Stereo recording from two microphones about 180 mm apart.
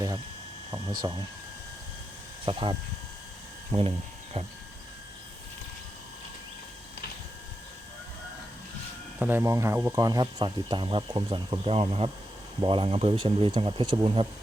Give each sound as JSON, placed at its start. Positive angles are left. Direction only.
{"t": 2.5, "sound": "speech", "side_deg": -25}
{"t": 4.4, "sound": "train", "side_deg": -30}
{"t": 9.1, "sound": "speech", "side_deg": -10}